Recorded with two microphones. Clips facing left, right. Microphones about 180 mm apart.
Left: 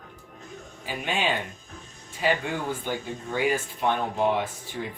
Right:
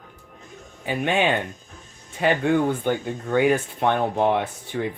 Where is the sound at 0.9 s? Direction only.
60° right (ahead or behind).